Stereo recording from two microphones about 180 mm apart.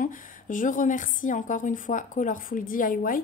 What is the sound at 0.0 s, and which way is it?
Speech, 45° left (ahead or behind).